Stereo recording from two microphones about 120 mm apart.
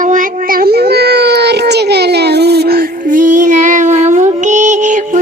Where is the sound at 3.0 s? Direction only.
90° right.